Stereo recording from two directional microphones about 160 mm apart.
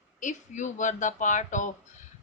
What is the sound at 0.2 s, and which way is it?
A woman's voice, 50° left (ahead or behind).